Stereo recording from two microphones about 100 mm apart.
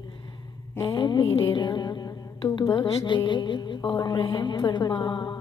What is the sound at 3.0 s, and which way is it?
Speech, 50° left (ahead or behind).